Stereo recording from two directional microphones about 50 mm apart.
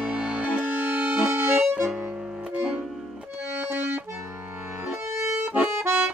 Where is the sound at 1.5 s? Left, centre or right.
Right.